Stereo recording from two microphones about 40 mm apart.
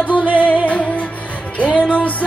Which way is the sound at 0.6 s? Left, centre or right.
Left.